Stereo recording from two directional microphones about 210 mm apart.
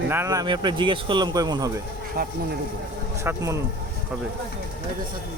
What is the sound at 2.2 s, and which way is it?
Speech, 45° right (ahead or behind).